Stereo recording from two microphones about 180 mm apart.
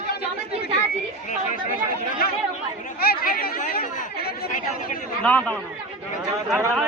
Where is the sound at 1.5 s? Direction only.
45° left (ahead or behind).